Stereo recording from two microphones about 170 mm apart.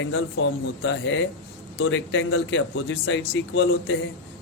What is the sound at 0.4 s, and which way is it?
Speech, 90° left.